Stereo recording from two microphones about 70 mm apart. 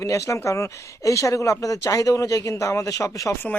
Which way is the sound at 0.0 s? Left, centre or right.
Left.